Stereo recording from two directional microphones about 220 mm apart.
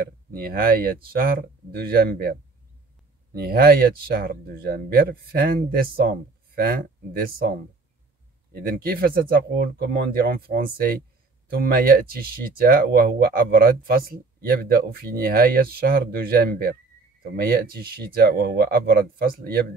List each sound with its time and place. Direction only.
0.0 s speech: 40° right (ahead or behind)
3.3 s speech: 45° right (ahead or behind)
8.5 s speech: 45° right (ahead or behind)